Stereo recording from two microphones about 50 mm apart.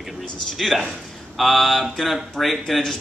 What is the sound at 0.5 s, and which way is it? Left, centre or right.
A man's voice, centre.